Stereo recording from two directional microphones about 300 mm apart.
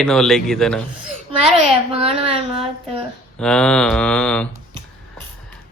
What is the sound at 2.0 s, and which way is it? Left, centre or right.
Speech, centre.